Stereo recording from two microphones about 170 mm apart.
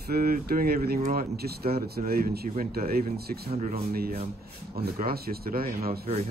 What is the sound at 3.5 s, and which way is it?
Speech, 40° right (ahead or behind).